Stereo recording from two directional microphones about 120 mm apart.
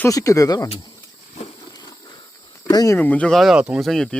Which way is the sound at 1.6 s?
35° left (ahead or behind).